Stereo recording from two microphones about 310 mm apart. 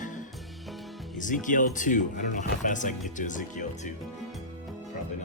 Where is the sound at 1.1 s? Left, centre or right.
Left.